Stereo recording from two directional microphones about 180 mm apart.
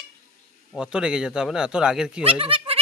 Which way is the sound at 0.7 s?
5° right (ahead or behind).